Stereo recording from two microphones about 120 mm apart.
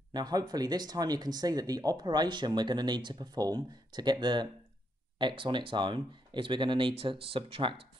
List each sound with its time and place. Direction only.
0.1 s speech: 35° right (ahead or behind); by 7.8 s 50° right (ahead or behind)